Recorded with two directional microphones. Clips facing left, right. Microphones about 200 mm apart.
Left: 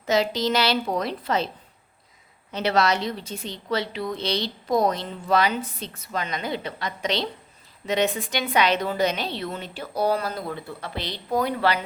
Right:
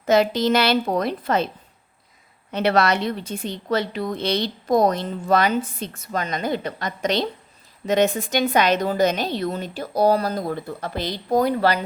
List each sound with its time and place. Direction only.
0.0 s a woman's voice: 55° right (ahead or behind)
2.5 s a woman's voice: 55° right (ahead or behind); by 11.8 s 40° right (ahead or behind)